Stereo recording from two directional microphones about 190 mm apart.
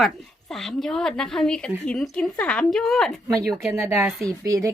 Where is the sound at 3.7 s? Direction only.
15° right (ahead or behind).